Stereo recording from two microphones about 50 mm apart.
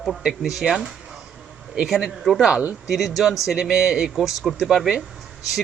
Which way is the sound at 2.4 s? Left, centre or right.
Centre.